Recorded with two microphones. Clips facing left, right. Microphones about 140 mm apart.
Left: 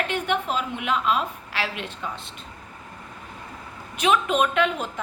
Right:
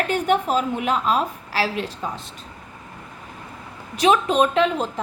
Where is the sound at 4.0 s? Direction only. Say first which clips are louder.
Right 4 dB; 35° right (ahead or behind).